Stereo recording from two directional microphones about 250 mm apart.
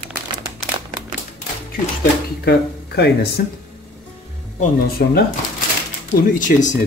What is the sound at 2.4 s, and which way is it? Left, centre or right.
Speech, left.